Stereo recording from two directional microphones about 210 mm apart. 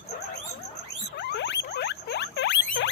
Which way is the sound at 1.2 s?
55° left (ahead or behind).